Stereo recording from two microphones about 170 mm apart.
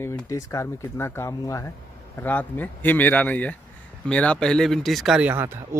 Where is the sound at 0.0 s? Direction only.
10° left (ahead or behind).